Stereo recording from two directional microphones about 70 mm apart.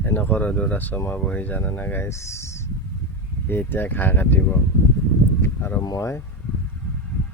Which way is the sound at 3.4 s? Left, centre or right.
Left.